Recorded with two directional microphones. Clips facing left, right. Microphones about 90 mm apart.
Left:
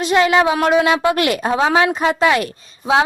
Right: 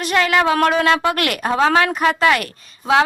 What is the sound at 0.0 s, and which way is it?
A woman's voice, 20° left (ahead or behind).